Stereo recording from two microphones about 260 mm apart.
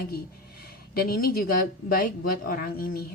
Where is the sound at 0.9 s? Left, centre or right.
Left.